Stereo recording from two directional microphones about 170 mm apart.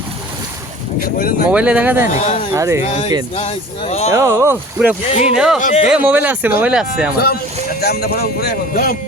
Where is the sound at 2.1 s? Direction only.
40° left (ahead or behind).